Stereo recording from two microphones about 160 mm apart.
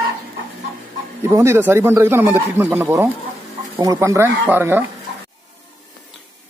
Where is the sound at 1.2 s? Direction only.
15° right (ahead or behind).